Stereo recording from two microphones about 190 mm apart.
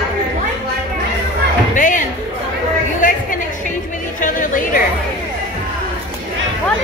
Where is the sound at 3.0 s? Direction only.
45° left (ahead or behind).